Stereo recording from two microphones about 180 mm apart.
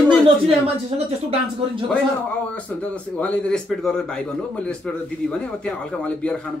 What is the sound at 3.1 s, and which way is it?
A man's voice, 5° left (ahead or behind).